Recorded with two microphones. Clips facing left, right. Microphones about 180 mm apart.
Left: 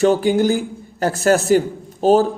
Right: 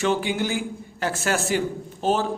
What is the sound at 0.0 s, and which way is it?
A man's voice, 40° left (ahead or behind).